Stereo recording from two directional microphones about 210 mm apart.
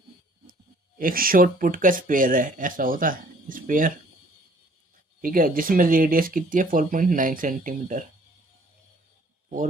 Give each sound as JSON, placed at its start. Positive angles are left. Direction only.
{"t": 0.9, "sound": "speech", "side_deg": -40}
{"t": 5.2, "sound": "speech", "side_deg": -40}